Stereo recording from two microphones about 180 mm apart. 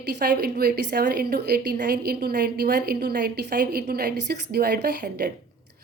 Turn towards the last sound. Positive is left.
turn(degrees=-60)  # may be behind; listen again after turning